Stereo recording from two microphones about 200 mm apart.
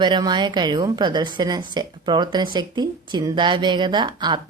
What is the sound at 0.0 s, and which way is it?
A woman's voice, 20° right (ahead or behind).